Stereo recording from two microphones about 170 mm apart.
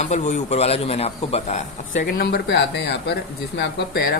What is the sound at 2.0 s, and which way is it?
Speech, 70° left (ahead or behind).